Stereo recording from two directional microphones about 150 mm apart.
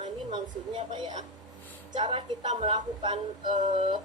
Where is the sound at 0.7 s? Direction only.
30° right (ahead or behind).